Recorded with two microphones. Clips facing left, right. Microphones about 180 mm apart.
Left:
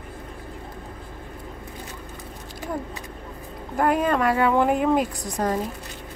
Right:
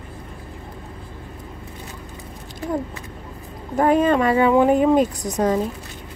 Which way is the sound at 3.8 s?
20° right (ahead or behind).